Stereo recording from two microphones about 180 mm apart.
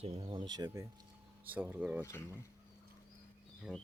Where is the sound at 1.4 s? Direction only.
10° right (ahead or behind).